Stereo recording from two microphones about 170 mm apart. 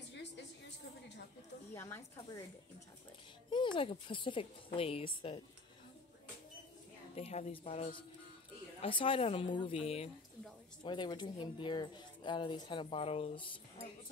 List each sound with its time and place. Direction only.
0.1 s a sound: 90° left
1.7 s speech: 15° left (ahead or behind)
3.4 s speech: 30° left (ahead or behind)
7.2 s speech: 40° left (ahead or behind)